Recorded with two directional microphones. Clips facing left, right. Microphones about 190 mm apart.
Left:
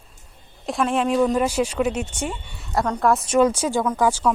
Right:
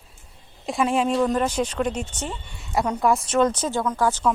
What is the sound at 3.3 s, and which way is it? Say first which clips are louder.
Speech: left 3 dB; 10° left (ahead or behind).